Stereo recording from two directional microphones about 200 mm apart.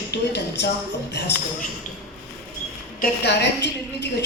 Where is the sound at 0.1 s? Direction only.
60° left (ahead or behind).